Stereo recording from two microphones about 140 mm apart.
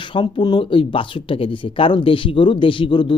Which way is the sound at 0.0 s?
35° left (ahead or behind).